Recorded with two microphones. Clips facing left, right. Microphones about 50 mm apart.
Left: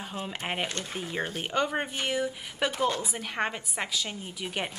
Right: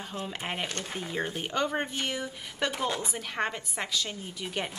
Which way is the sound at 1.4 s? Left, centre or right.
Centre.